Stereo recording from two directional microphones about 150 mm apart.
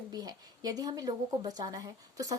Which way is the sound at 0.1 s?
25° right (ahead or behind).